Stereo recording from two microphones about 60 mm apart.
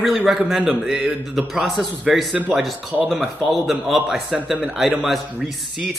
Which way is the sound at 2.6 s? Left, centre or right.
Centre.